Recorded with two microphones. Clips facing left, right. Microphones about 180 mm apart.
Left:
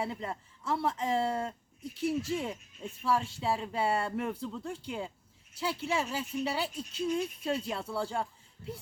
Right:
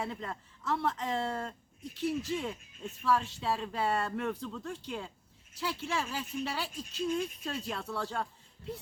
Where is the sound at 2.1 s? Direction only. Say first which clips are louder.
Left 2 dB; 30° left (ahead or behind).